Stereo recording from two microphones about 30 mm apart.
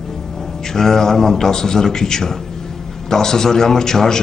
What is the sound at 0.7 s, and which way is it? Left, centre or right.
A man's voice, centre.